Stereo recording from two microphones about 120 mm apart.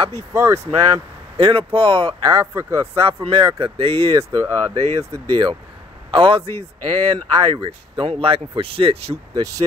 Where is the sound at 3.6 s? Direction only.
55° right (ahead or behind).